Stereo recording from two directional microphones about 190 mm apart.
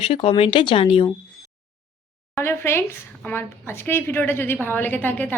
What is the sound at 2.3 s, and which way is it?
A woman's voice, 15° left (ahead or behind).